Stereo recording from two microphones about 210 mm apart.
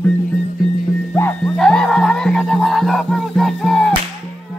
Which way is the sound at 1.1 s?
5° left (ahead or behind).